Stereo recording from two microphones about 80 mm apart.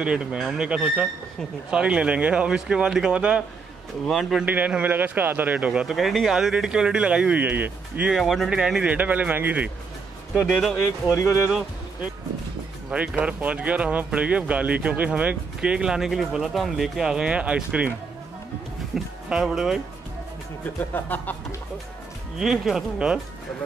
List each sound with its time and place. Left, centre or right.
0.0 s speech: centre
4.0 s speech: centre
4.5 s a man's voice: centre
5.9 s speech: centre; by 8.1 s right
8.1 s speech: centre
8.8 s a man's voice: centre
10.4 s speech: centre
11.4 s speech: centre
18.9 s speech: centre
20.9 s speech: left
22.4 s speech: centre